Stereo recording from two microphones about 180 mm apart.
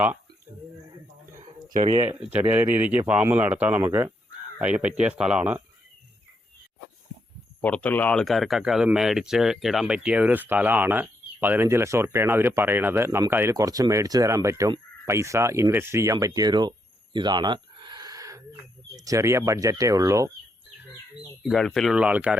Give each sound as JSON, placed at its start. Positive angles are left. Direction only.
{"t": 1.7, "sound": "speech", "side_deg": -35}
{"t": 2.0, "sound": "speech", "side_deg": -10}
{"t": 7.6, "sound": "speech", "side_deg": 5}
{"t": 21.4, "sound": "speech", "side_deg": 0}